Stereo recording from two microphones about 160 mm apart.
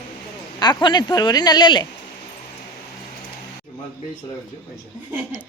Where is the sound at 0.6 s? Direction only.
30° left (ahead or behind).